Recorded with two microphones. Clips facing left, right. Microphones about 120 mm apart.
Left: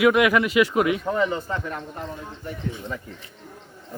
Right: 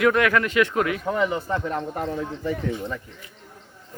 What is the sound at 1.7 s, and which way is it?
Speech, 60° right (ahead or behind).